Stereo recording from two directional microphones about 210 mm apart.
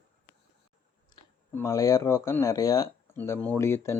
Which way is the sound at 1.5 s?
15° left (ahead or behind).